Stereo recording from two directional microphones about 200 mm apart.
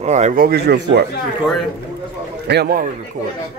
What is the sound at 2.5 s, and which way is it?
Speech, 50° right (ahead or behind).